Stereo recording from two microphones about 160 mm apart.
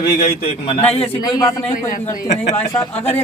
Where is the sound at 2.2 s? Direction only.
45° left (ahead or behind).